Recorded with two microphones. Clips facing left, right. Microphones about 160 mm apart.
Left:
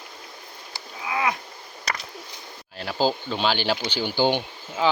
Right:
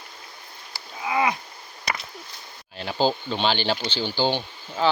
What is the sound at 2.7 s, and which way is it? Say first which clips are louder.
Speech: even; 5° left (ahead or behind).